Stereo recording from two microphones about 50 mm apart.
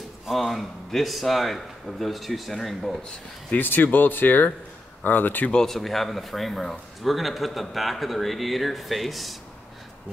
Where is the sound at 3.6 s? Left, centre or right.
Left.